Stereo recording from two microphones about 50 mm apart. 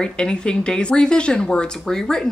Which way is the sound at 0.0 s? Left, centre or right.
Centre.